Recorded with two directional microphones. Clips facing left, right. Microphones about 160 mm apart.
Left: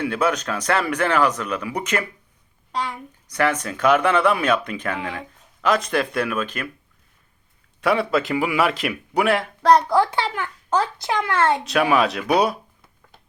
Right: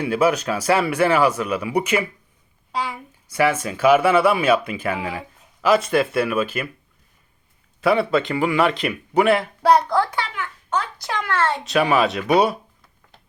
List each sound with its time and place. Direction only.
0.0 s a man's voice: 10° right (ahead or behind)
7.8 s a man's voice: centre (ahead or behind)
9.9 s a child's voice: 20° left (ahead or behind)
11.6 s a man's voice: centre (ahead or behind)